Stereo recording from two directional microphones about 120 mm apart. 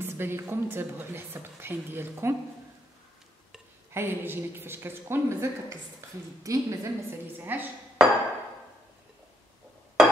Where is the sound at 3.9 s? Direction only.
20° right (ahead or behind).